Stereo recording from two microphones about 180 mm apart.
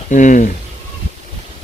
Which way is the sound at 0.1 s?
45° left (ahead or behind).